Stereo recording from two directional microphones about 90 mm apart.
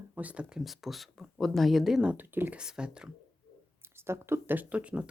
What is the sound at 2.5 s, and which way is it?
Speech, 10° right (ahead or behind).